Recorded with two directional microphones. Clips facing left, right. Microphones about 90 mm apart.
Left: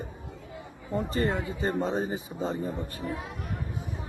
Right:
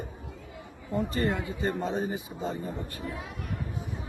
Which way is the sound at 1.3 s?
35° left (ahead or behind).